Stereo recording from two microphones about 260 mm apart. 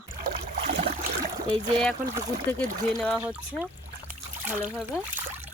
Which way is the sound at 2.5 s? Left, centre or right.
Centre.